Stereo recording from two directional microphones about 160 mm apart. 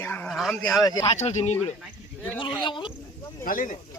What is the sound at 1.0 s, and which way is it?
Speech, 45° left (ahead or behind).